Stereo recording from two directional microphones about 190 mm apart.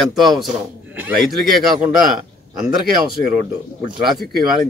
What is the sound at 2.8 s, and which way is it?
Speech, 50° right (ahead or behind).